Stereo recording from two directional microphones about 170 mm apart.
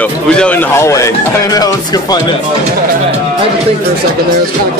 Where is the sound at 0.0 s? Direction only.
5° left (ahead or behind).